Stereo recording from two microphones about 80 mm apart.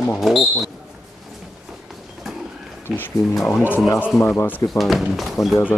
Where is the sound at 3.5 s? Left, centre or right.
Left.